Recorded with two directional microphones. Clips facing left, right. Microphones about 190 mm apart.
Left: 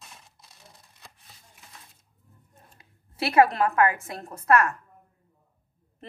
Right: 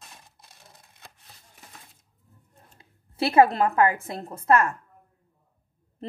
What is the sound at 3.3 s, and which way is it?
A woman's voice, 30° right (ahead or behind).